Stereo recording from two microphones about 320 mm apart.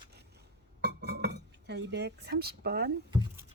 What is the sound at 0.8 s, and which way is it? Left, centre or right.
Chink, right.